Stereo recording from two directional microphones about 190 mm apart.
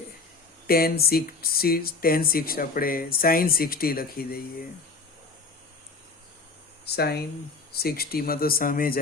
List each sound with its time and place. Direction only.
0.7 s speech: 50° left (ahead or behind)
6.8 s speech: 55° left (ahead or behind)